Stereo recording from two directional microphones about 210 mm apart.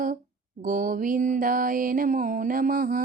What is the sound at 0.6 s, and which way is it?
Mantra, 40° right (ahead or behind).